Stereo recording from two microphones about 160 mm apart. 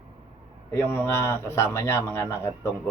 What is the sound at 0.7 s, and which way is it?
Speech, 15° left (ahead or behind).